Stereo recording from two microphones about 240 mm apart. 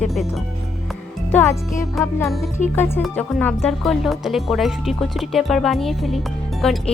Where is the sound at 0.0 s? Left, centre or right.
Centre.